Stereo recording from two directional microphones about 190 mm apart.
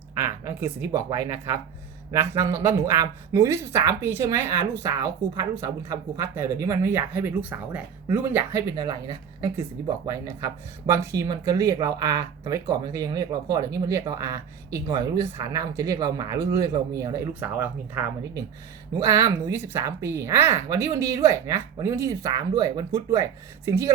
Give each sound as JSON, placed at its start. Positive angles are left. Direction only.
{"t": 0.2, "sound": "speech", "side_deg": -15}